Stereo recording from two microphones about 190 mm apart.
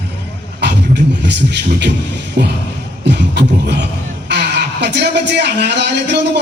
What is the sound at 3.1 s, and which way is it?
A man's voice, 60° right (ahead or behind).